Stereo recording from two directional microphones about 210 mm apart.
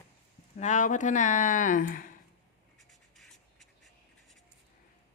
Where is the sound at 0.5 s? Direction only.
35° left (ahead or behind).